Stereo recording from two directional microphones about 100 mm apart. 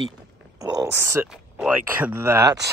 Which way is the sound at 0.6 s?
40° right (ahead or behind).